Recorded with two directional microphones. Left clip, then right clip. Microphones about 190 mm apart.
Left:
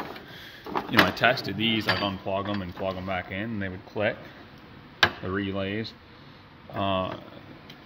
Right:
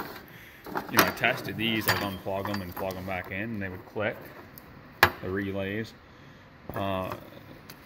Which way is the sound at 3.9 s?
30° left (ahead or behind).